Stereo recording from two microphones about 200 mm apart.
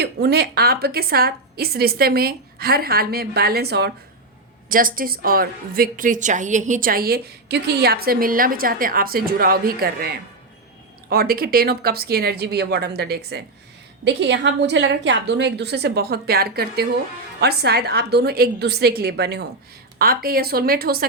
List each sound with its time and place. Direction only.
0.0 s a woman's voice: 55° right (ahead or behind)
4.7 s a woman's voice: 45° right (ahead or behind)
11.1 s a woman's voice: 50° right (ahead or behind)